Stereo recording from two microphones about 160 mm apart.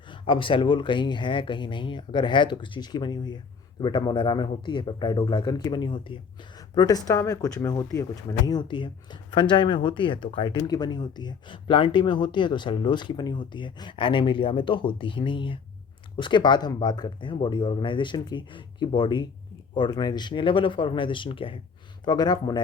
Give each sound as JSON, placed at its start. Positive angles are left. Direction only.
{"t": 0.1, "sound": "speech", "side_deg": 30}